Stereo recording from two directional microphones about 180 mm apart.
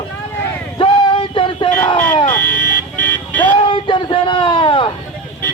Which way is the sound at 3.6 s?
25° left (ahead or behind).